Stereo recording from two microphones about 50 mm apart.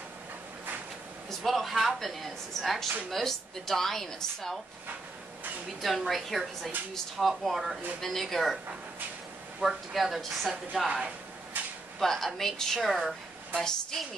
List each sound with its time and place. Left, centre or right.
1.4 s a woman's voice: centre
5.8 s a woman's voice: centre
9.6 s a woman's voice: centre
11.6 s a sound: right
12.0 s a woman's voice: centre